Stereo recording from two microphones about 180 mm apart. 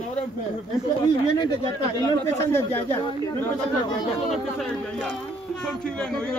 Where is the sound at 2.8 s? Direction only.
25° left (ahead or behind).